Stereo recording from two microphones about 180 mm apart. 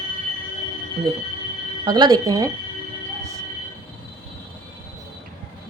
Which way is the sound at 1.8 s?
25° right (ahead or behind).